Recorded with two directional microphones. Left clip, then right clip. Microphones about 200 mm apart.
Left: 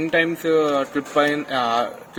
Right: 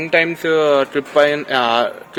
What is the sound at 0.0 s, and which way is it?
Speech, 25° right (ahead or behind).